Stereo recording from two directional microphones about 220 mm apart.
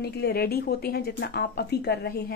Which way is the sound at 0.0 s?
45° left (ahead or behind).